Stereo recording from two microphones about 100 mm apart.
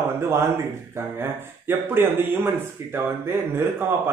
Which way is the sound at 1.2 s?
25° right (ahead or behind).